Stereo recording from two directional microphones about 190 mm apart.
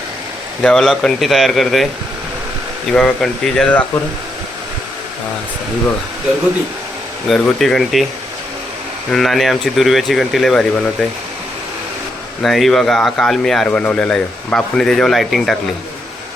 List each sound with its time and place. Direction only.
0.6 s speech: 5° left (ahead or behind)
2.9 s speech: 5° left (ahead or behind)
7.3 s speech: centre (ahead or behind)
9.1 s speech: centre (ahead or behind)
12.4 s speech: centre (ahead or behind)